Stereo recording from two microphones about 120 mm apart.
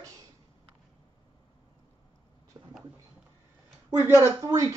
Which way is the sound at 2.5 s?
25° right (ahead or behind).